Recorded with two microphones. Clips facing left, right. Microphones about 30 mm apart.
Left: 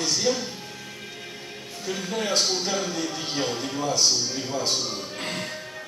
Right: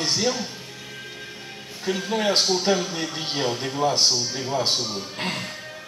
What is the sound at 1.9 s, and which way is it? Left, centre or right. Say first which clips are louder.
Speech: right 4 dB; right.